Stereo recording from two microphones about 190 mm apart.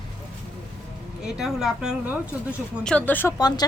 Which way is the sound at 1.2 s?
Centre (ahead or behind).